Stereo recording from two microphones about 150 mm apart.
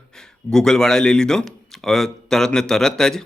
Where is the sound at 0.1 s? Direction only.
5° left (ahead or behind).